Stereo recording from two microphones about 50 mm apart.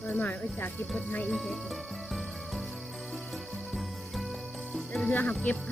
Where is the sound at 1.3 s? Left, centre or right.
Centre.